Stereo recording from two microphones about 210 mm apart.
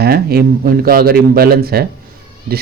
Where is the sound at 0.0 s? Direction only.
45° right (ahead or behind).